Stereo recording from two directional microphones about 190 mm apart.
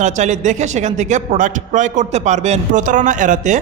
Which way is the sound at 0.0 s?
40° right (ahead or behind).